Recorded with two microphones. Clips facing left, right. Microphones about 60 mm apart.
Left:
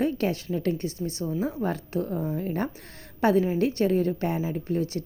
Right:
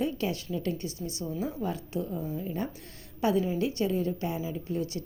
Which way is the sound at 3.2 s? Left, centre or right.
Left.